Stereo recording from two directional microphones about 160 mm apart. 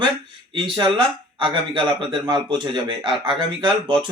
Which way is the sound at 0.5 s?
30° right (ahead or behind).